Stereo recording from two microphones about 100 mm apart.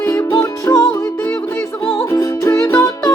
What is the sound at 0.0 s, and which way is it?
Music, 25° left (ahead or behind).